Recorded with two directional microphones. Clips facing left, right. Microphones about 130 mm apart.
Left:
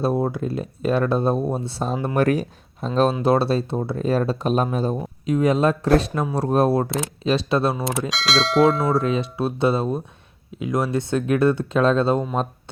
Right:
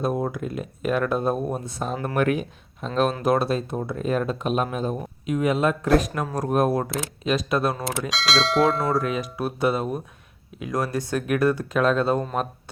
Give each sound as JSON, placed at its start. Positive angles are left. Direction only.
{"t": 0.0, "sound": "speech", "side_deg": 30}
{"t": 8.1, "sound": "bell", "side_deg": 0}
{"t": 9.0, "sound": "speech", "side_deg": 25}